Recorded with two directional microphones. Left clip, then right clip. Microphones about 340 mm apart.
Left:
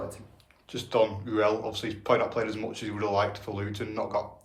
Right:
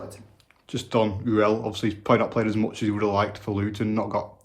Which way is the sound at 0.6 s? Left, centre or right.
Right.